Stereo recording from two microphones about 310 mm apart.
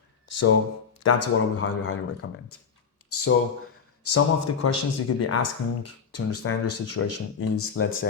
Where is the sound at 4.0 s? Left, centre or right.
Left.